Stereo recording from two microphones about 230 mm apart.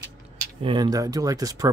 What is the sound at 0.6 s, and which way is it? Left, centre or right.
Speech, centre.